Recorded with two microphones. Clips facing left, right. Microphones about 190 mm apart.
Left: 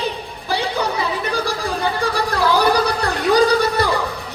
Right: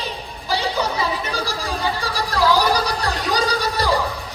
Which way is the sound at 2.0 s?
55° left (ahead or behind).